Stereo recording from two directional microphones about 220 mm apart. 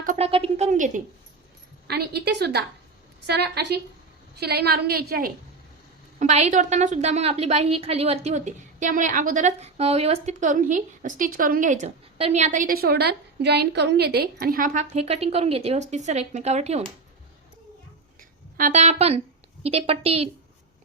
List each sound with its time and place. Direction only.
0.0 s a sound: 35° right (ahead or behind)
0.3 s a woman's voice: 25° right (ahead or behind)
1.9 s a woman's voice: 45° right (ahead or behind)
6.1 s a woman's voice: 30° right (ahead or behind)
18.2 s a sound: 40° right (ahead or behind)
19.6 s a woman's voice: 25° right (ahead or behind)